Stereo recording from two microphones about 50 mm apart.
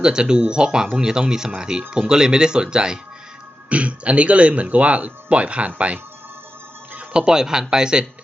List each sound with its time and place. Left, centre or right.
0.0 s speech: centre
3.7 s speech: right
7.1 s speech: centre